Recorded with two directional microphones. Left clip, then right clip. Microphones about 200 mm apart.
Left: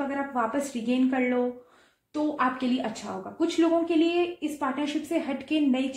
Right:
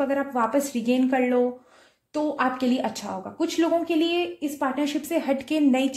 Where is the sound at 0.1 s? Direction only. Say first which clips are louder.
Right 5 dB; 40° right (ahead or behind).